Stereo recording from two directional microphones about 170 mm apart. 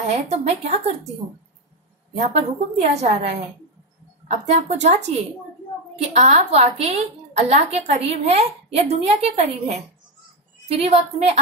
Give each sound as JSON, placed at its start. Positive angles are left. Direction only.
{"t": 0.1, "sound": "a woman's voice", "side_deg": -40}
{"t": 2.1, "sound": "a woman's voice", "side_deg": -40}